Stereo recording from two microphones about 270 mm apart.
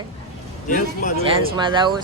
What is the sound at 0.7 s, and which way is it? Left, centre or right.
Speech, left.